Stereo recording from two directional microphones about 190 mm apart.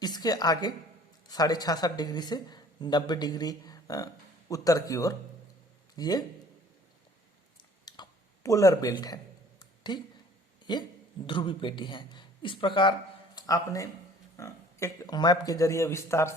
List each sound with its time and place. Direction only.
0.0 s a woman's voice: 20° left (ahead or behind)
7.9 s clicking: 20° left (ahead or behind)
8.4 s speech: 15° left (ahead or behind)
9.6 s a sound: 25° left (ahead or behind)
10.7 s speech: 20° left (ahead or behind)